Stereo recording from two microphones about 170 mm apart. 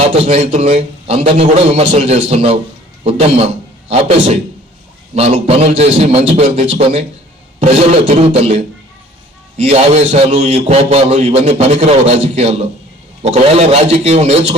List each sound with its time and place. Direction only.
0.1 s a man's voice: 35° right (ahead or behind)